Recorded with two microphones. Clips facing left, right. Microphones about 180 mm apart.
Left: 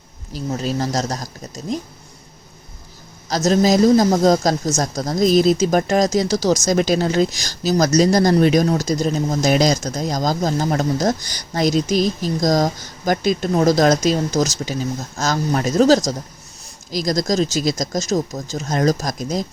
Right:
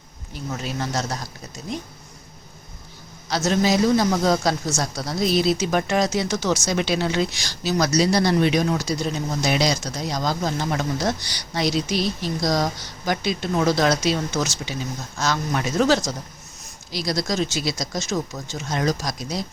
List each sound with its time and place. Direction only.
0.3 s speech: 35° left (ahead or behind)
3.2 s speech: 40° left (ahead or behind)